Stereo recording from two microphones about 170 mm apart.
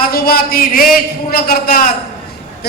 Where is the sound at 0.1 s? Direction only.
60° left (ahead or behind).